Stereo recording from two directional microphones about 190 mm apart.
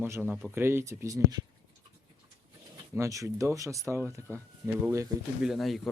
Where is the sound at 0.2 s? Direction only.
Centre (ahead or behind).